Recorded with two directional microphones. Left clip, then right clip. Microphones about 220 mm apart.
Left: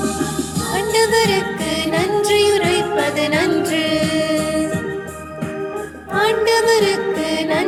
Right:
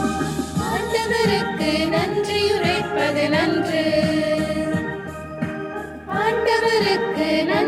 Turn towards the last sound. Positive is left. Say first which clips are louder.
# left 4 dB
turn(degrees=40)  # may be behind; listen again after turning